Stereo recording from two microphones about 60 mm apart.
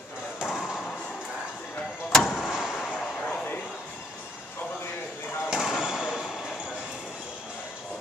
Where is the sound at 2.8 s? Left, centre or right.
Centre.